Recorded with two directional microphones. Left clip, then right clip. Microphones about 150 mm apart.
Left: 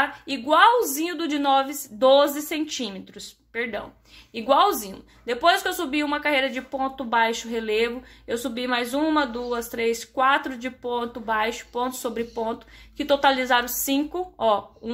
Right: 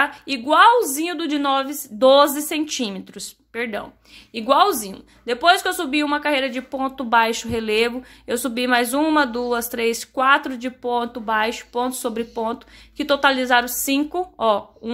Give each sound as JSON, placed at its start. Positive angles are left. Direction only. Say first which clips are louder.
{"t": 0.0, "sound": "a woman's voice", "louder": "right 4 dB", "side_deg": -30}